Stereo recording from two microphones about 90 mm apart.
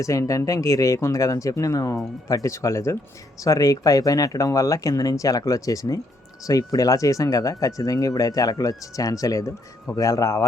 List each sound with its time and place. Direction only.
0.0 s speech: 35° left (ahead or behind)